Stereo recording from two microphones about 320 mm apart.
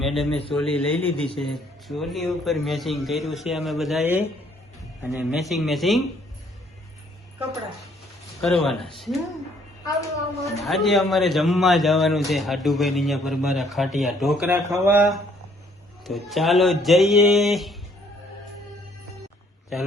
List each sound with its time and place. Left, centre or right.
0.0 s a sound: centre
0.3 s speech: centre
0.5 s a man's voice: centre
8.4 s a man's voice: centre
10.6 s a man's voice: centre